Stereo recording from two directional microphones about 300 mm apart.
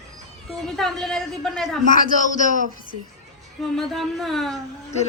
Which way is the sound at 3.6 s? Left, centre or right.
Centre.